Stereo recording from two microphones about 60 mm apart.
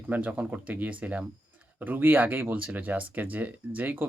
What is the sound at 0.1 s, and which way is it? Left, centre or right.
Speech, right.